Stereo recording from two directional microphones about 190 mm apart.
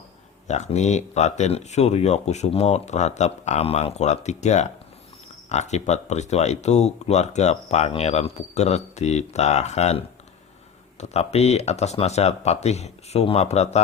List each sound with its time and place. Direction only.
0.4 s speech: 35° left (ahead or behind)
11.0 s speech: 35° left (ahead or behind)